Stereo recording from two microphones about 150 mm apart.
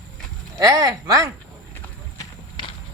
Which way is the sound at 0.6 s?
25° right (ahead or behind).